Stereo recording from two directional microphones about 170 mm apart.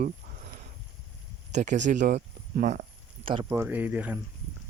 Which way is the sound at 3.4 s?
10° right (ahead or behind).